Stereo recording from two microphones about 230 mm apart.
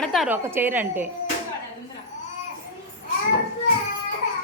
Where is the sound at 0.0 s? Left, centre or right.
Centre.